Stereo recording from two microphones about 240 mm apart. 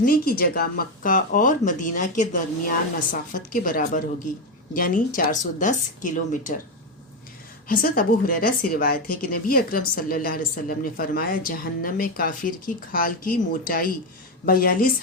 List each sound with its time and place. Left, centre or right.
0.0 s a woman's voice: left
7.7 s a woman's voice: left